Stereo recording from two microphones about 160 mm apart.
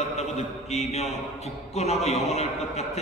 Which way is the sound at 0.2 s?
45° left (ahead or behind).